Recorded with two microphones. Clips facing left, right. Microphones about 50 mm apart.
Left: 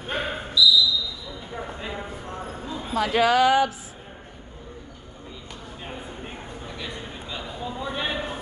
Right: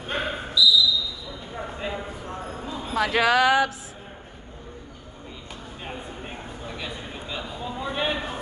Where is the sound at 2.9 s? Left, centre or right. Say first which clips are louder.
Even; right.